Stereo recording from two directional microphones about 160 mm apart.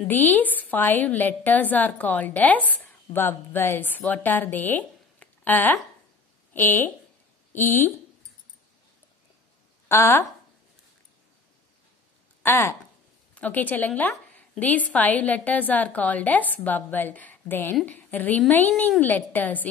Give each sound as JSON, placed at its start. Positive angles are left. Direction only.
{"t": 0.1, "sound": "a woman's voice", "side_deg": 10}
{"t": 9.8, "sound": "speech", "side_deg": 15}
{"t": 12.4, "sound": "a woman's voice", "side_deg": 15}